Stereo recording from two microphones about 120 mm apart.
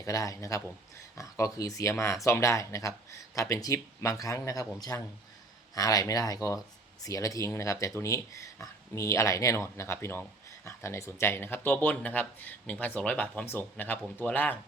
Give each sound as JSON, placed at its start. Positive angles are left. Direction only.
{"t": 0.0, "sound": "speech", "side_deg": 30}